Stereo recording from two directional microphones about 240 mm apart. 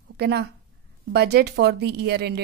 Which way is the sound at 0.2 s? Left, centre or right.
Right.